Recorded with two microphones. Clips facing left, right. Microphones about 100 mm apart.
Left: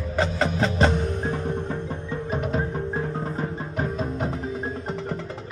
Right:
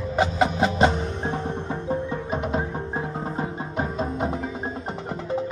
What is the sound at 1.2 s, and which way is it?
Music, 30° right (ahead or behind).